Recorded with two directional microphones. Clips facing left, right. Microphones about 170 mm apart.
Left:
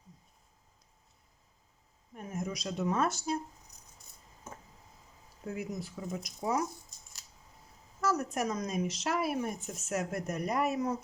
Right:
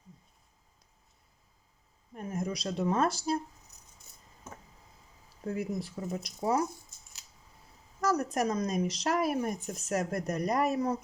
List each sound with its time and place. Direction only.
2.1 s speech: 35° right (ahead or behind)
5.5 s speech: 35° right (ahead or behind)
8.0 s speech: 40° right (ahead or behind)